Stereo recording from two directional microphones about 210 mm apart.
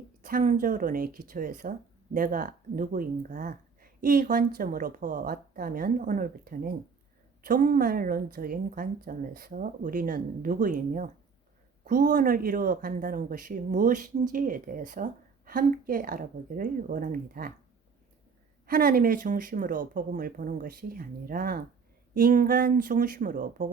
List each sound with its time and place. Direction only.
0.2 s speech: 40° right (ahead or behind)
18.6 s speech: 45° right (ahead or behind)